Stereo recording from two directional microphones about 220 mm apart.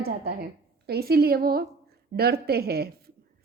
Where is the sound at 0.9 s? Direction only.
45° right (ahead or behind).